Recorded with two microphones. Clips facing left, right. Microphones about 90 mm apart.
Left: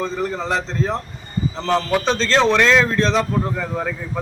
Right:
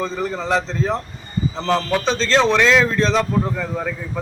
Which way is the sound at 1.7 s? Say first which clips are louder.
Left 1 dB; 10° left (ahead or behind).